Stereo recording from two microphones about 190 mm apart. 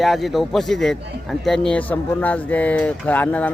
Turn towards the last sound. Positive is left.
turn(degrees=10)  # may be behind; listen again after turning